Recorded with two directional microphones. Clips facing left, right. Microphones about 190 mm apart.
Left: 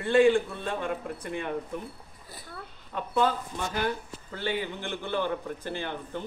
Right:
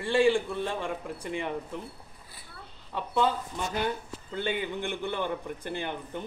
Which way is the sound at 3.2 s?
20° right (ahead or behind).